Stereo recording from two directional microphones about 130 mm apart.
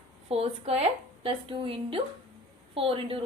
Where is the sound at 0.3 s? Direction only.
50° right (ahead or behind).